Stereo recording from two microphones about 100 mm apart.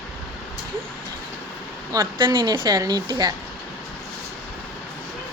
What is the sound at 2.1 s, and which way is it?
Speech, 50° right (ahead or behind).